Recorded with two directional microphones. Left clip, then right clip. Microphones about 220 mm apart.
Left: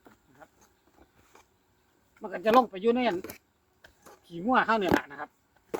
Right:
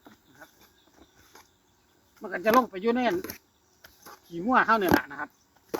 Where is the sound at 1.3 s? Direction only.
5° left (ahead or behind).